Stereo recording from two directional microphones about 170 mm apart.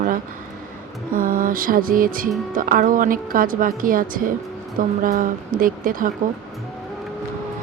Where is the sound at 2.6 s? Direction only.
55° right (ahead or behind).